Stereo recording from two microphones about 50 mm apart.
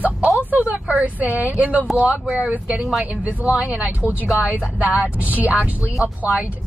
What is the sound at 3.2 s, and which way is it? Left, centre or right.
Speech, right.